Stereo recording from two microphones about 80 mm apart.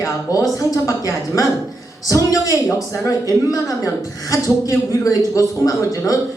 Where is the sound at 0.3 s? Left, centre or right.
Left.